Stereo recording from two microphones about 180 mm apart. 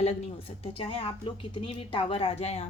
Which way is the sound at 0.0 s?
35° left (ahead or behind).